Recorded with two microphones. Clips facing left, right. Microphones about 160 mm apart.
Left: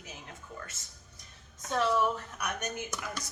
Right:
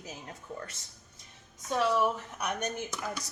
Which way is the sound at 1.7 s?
5° right (ahead or behind).